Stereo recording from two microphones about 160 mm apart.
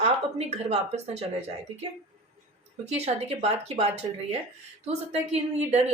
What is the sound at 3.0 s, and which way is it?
Speech, 45° right (ahead or behind).